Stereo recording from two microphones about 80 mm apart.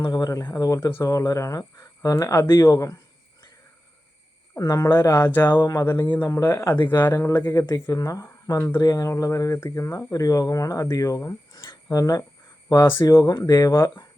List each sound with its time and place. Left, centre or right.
0.0 s speech: left
4.5 s speech: left
4.9 s speech: left
5.5 s speech: left
5.8 s speech: left
7.1 s speech: left
8.8 s speech: left
13.7 s speech: left